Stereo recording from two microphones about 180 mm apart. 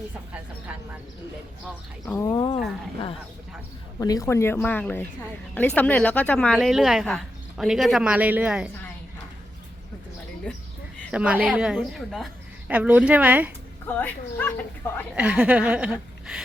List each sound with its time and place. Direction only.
2.0 s speech: 15° left (ahead or behind)
4.0 s speech: 20° left (ahead or behind); by 8.7 s 5° right (ahead or behind)
11.1 s a woman's voice: 5° right (ahead or behind)
13.8 s speech: 10° left (ahead or behind)
15.1 s a woman's voice: 5° right (ahead or behind)